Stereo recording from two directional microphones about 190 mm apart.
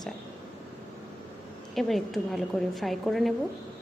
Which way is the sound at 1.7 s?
Centre (ahead or behind).